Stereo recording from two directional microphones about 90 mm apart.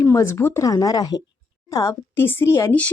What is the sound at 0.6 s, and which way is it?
A woman's voice, 45° left (ahead or behind).